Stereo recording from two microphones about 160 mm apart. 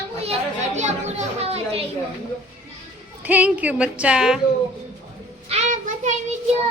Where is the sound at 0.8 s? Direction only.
45° right (ahead or behind).